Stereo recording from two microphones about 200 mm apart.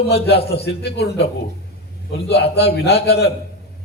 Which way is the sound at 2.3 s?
55° left (ahead or behind).